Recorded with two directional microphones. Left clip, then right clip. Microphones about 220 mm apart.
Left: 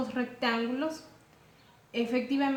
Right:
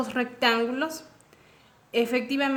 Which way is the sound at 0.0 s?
50° right (ahead or behind).